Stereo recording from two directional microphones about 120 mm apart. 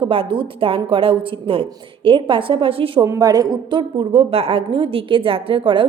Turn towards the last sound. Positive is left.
turn(degrees=-45)  # may be behind; listen again after turning